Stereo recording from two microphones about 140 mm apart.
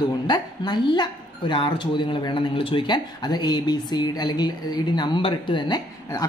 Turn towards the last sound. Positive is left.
turn(degrees=30)  # may be behind; listen again after turning